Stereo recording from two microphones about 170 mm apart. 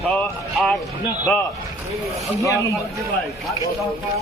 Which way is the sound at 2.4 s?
20° left (ahead or behind).